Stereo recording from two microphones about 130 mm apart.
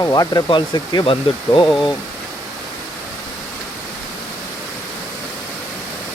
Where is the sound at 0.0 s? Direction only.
30° left (ahead or behind).